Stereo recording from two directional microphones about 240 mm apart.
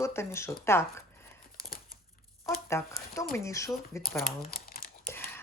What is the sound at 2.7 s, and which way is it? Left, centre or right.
Speech, centre.